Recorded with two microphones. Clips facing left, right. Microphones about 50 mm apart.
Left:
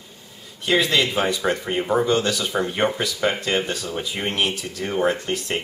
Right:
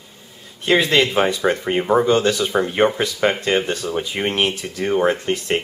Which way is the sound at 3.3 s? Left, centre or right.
Right.